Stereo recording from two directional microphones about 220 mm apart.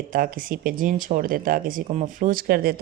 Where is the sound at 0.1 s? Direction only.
40° right (ahead or behind).